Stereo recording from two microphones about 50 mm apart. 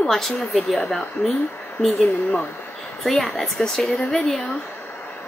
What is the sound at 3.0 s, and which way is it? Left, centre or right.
A woman's voice, centre.